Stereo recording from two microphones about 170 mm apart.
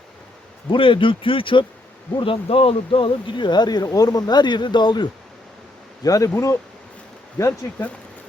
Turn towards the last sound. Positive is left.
turn(degrees=15)  # may be behind; listen again after turning